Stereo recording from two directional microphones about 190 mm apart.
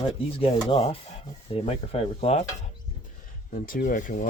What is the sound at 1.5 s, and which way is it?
Stir, 30° left (ahead or behind).